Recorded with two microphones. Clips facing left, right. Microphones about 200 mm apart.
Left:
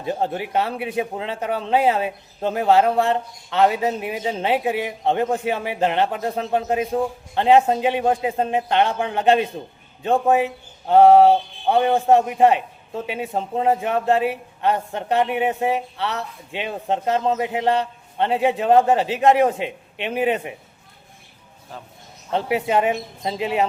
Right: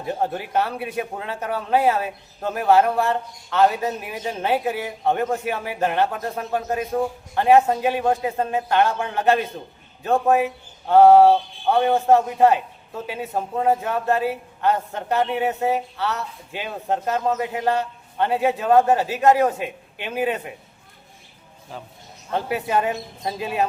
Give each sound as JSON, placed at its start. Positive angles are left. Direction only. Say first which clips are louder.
{"t": 0.0, "sound": "a man's voice", "louder": "left 1 dB", "side_deg": 25}
{"t": 22.3, "sound": "a man's voice", "louder": "left 3 dB", "side_deg": 25}